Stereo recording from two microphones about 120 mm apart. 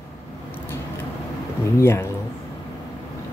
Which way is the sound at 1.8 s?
20° left (ahead or behind).